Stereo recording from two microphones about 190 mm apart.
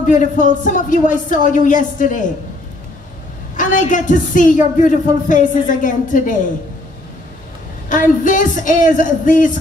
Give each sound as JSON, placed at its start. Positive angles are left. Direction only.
{"t": 0.0, "sound": "a woman's voice", "side_deg": 40}
{"t": 3.5, "sound": "a woman's voice", "side_deg": 45}
{"t": 7.9, "sound": "a woman's voice", "side_deg": 45}